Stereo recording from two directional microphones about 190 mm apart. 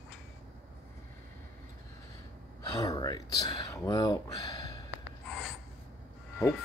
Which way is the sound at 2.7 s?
20° left (ahead or behind).